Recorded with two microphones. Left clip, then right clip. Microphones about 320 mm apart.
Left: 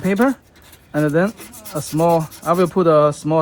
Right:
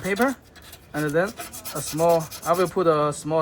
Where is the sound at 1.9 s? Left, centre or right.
Left.